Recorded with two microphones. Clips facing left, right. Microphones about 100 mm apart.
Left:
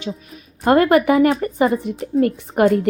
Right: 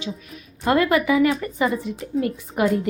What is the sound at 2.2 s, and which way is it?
Speech, 50° left (ahead or behind).